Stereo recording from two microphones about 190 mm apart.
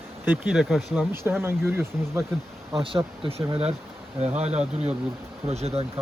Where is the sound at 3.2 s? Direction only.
30° right (ahead or behind).